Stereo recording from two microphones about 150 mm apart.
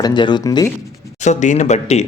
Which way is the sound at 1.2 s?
50° left (ahead or behind).